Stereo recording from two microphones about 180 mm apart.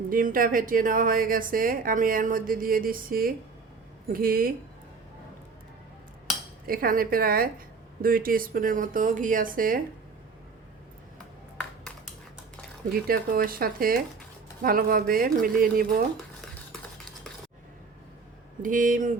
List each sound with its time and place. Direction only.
0.1 s a woman's voice: 50° right (ahead or behind)
6.7 s a woman's voice: 50° right (ahead or behind)
12.9 s a woman's voice: 55° right (ahead or behind)
18.6 s a woman's voice: 50° right (ahead or behind)